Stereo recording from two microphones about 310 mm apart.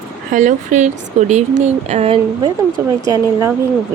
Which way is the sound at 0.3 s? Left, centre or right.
Right.